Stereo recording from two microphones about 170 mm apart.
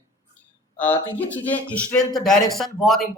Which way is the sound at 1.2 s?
10° left (ahead or behind).